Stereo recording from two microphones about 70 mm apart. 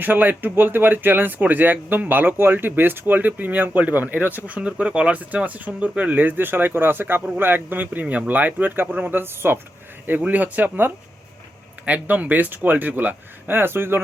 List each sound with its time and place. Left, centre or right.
0.0 s speech: right